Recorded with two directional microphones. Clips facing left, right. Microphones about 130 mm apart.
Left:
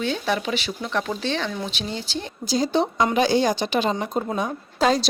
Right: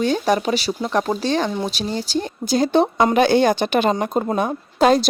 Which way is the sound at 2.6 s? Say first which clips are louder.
Right 5 dB; 55° right (ahead or behind).